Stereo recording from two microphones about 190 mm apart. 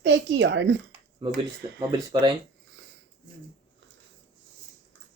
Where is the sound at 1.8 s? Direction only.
20° right (ahead or behind).